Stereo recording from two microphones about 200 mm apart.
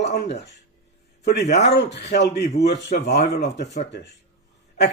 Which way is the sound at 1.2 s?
55° left (ahead or behind).